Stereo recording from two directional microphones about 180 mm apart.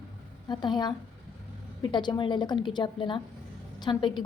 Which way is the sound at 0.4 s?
25° left (ahead or behind).